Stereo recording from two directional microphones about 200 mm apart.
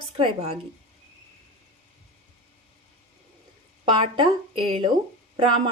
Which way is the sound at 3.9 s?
25° right (ahead or behind).